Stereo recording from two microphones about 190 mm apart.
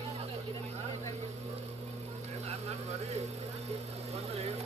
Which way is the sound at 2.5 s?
35° right (ahead or behind).